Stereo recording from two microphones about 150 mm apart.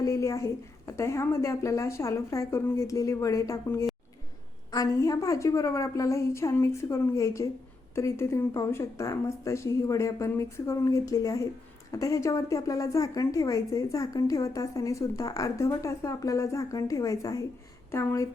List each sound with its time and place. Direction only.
0.0 s a woman's voice: 20° left (ahead or behind)